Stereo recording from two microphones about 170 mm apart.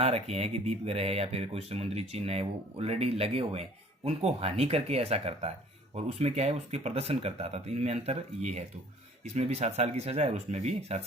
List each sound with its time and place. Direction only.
0.0 s speech: 35° right (ahead or behind)